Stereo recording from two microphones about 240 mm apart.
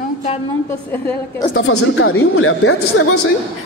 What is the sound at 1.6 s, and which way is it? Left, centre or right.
Speech, left.